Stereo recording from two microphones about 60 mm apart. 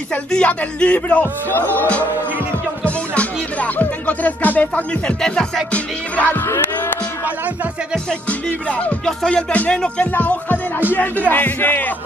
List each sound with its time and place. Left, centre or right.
0.3 s speech: centre; by 1.9 s left
2.8 s music: left
5.2 s music: centre
5.7 s speech: left
8.3 s speech: left
9.0 s music: centre
10.1 s speech: left